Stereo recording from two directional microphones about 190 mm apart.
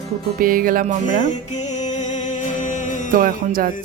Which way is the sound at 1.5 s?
40° left (ahead or behind).